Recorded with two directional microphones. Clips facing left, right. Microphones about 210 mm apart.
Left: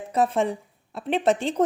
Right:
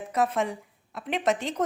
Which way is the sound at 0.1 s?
30° left (ahead or behind).